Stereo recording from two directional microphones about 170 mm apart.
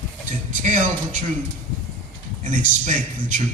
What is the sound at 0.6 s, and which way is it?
Speech, 50° right (ahead or behind).